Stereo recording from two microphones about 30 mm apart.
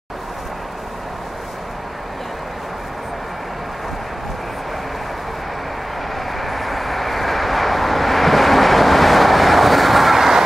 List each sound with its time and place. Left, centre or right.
6.1 s vehicle: centre